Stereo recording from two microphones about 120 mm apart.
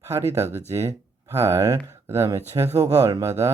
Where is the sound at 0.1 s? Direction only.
25° right (ahead or behind).